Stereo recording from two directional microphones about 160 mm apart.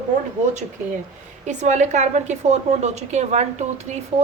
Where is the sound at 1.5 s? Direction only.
45° right (ahead or behind).